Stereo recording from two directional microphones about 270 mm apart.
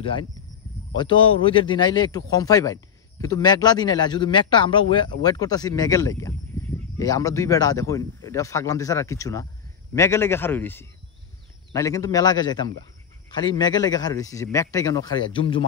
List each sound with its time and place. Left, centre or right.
0.9 s a man's voice: centre